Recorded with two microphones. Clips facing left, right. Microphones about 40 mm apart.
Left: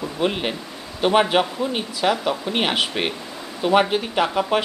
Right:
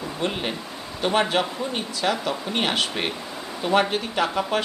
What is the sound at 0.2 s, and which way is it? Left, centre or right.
A man's voice, centre.